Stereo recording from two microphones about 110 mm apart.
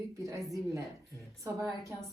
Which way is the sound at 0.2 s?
30° right (ahead or behind).